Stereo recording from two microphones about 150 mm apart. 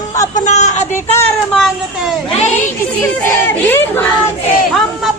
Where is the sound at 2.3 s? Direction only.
45° left (ahead or behind).